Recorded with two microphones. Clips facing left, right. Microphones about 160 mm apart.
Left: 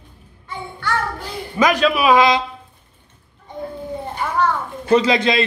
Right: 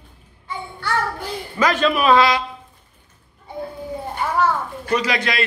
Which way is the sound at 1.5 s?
15° left (ahead or behind).